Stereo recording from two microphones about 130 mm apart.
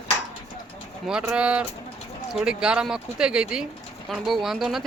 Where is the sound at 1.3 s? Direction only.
10° right (ahead or behind).